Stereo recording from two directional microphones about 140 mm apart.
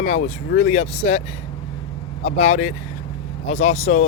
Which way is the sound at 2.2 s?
50° left (ahead or behind).